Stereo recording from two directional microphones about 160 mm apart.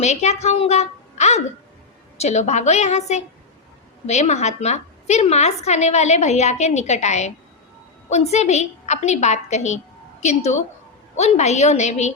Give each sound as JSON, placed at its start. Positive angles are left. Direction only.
{"t": 0.0, "sound": "a woman's voice", "side_deg": 45}